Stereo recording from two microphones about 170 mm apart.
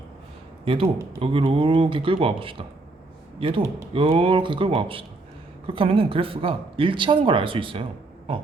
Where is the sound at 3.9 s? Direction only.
30° right (ahead or behind).